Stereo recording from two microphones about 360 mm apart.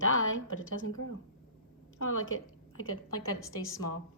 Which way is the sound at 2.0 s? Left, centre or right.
Left.